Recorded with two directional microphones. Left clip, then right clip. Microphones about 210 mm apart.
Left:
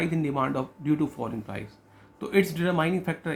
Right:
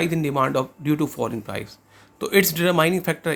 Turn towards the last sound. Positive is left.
turn(degrees=-40)  # may be behind; listen again after turning